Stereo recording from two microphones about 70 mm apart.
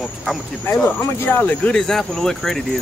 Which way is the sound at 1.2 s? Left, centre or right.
Left.